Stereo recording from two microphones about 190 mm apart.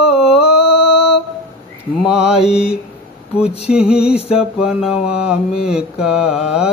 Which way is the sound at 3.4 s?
30° left (ahead or behind).